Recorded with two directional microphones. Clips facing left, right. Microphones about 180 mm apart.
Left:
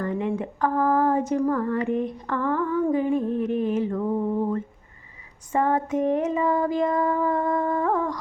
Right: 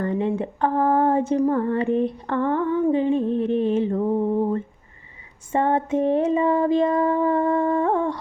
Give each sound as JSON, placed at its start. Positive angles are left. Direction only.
{"t": 0.0, "sound": "speech", "side_deg": -30}